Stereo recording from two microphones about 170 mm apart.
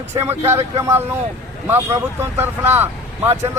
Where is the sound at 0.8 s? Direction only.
15° right (ahead or behind).